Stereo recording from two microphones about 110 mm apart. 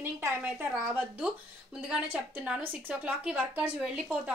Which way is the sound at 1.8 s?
10° right (ahead or behind).